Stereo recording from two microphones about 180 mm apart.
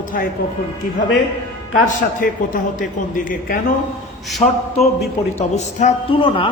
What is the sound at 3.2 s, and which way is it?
Speech, 50° left (ahead or behind).